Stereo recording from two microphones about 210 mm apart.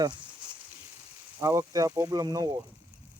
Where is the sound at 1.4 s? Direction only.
15° right (ahead or behind).